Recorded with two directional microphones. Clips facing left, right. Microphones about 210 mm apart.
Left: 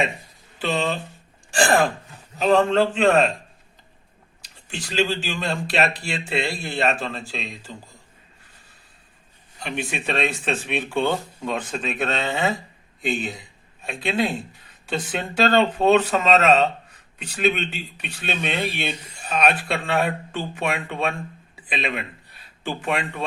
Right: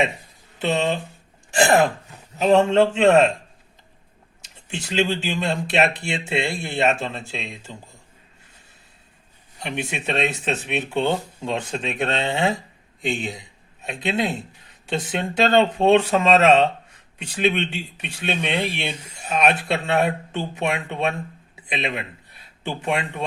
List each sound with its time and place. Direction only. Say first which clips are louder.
0.6 s speech: right 2 dB; 20° right (ahead or behind)
4.7 s speech: right 1 dB; 20° right (ahead or behind)
9.6 s speech: even; 20° right (ahead or behind)